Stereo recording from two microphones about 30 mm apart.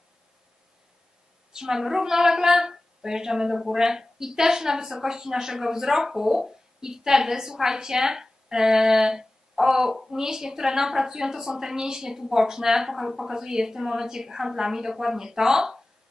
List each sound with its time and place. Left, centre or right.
1.5 s a woman's voice: centre